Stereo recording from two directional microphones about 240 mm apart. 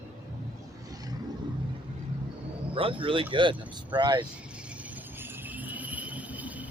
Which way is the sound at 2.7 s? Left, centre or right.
Right.